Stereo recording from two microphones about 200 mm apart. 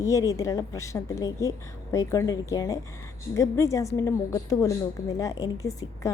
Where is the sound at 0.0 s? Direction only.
15° left (ahead or behind).